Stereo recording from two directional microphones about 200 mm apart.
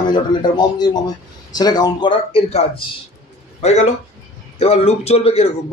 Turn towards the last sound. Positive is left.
turn(degrees=30)  # may be behind; listen again after turning